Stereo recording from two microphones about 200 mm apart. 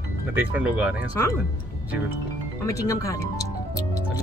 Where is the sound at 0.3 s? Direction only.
10° right (ahead or behind).